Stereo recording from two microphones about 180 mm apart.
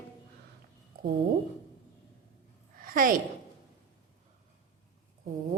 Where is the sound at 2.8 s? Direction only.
50° right (ahead or behind).